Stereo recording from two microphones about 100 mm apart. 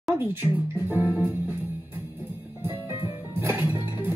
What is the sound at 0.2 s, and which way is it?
Speech, 20° right (ahead or behind).